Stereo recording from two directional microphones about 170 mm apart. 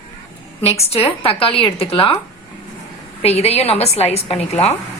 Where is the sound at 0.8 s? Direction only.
35° left (ahead or behind).